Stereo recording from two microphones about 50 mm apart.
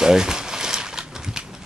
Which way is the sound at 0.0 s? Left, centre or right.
Centre.